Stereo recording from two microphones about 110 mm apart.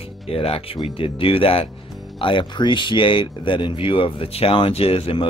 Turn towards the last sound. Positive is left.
turn(degrees=55)  # may be behind; listen again after turning